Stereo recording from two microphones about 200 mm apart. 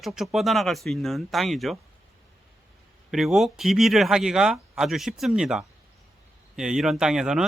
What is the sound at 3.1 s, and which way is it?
Speech, centre (ahead or behind).